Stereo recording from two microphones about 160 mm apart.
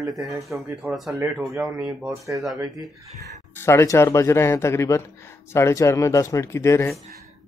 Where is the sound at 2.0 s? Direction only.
20° right (ahead or behind).